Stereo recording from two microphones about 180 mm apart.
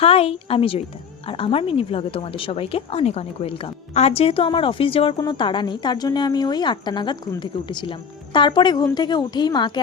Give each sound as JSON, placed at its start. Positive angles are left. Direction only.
{"t": 0.0, "sound": "a woman's voice", "side_deg": 35}